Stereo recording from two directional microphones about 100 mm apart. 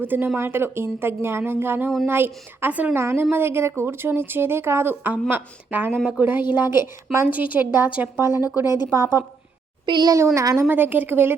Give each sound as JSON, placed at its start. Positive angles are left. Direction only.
{"t": 0.0, "sound": "a woman's voice", "side_deg": -20}
{"t": 9.8, "sound": "a child's voice", "side_deg": -45}
{"t": 10.3, "sound": "a woman's voice", "side_deg": -30}